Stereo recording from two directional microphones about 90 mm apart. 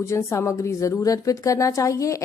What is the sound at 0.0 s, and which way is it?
A woman's voice, 30° left (ahead or behind).